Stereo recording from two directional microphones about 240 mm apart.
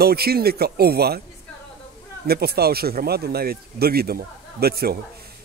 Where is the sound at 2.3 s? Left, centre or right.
Right.